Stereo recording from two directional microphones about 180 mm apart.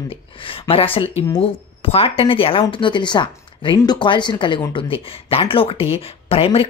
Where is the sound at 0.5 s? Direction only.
30° left (ahead or behind).